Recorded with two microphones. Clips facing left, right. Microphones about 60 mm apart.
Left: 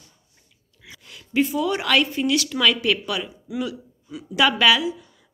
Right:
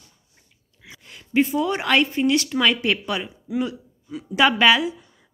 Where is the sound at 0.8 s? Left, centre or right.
Right.